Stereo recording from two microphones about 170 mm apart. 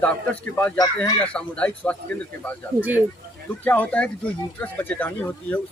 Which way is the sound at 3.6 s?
10° left (ahead or behind).